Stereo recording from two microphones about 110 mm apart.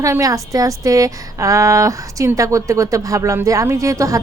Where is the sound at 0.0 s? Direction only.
30° right (ahead or behind).